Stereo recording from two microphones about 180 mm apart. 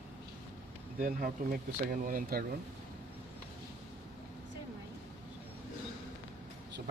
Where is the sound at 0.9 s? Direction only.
50° right (ahead or behind).